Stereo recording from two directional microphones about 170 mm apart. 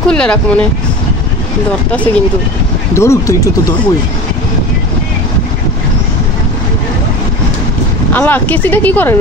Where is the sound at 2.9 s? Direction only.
15° left (ahead or behind).